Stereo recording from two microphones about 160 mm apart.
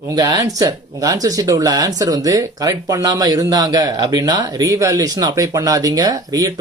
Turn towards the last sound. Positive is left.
turn(degrees=-20)  # may be behind; listen again after turning